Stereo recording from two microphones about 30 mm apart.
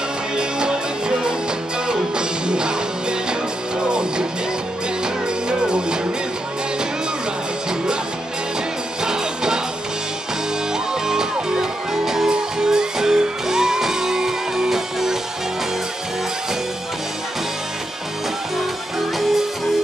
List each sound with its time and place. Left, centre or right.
0.4 s music: right
9.0 s music: right
11.5 s music: centre
18.6 s music: centre